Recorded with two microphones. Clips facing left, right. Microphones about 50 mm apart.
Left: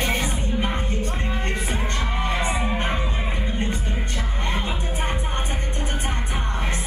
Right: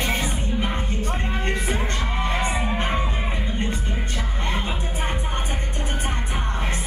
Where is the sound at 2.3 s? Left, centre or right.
Right.